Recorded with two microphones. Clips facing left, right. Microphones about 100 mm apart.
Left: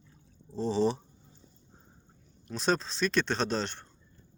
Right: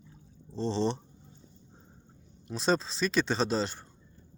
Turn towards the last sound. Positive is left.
turn(degrees=-5)  # may be behind; listen again after turning